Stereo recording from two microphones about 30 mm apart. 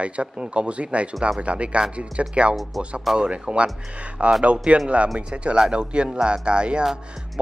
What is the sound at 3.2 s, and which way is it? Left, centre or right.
Speech, right.